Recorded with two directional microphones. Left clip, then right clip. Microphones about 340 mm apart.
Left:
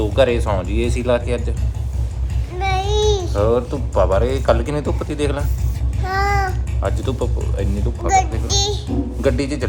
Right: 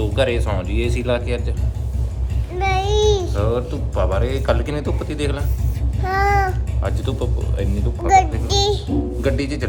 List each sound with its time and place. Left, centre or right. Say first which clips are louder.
0.0 s speech: left 4 dB; centre
2.6 s speech: right 1 dB; centre
8.0 s child singing: right 2 dB; centre
9.2 s speech: left 6 dB; centre